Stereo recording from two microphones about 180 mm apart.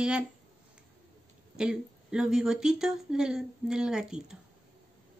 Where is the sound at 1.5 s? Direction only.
5° right (ahead or behind).